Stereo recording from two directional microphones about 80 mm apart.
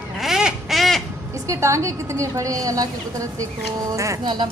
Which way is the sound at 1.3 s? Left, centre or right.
Right.